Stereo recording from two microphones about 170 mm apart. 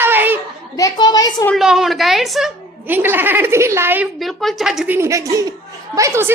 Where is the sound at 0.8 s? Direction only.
20° left (ahead or behind).